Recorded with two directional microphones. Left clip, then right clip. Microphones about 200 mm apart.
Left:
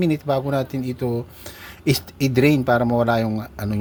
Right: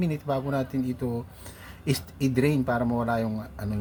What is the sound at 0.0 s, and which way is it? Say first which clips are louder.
Speech: left 8 dB; 35° left (ahead or behind).